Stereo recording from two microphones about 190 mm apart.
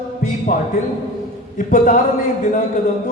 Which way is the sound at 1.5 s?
45° left (ahead or behind).